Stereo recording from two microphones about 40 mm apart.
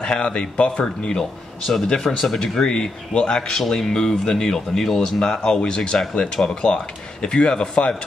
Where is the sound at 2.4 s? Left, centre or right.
Centre.